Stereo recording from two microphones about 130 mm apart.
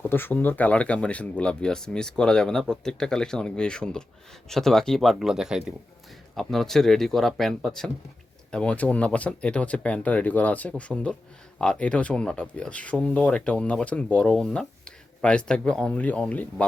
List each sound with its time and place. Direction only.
0.0 s speech: 15° left (ahead or behind)